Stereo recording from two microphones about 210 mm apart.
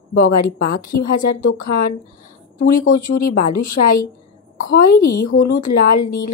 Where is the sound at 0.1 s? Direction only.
45° left (ahead or behind).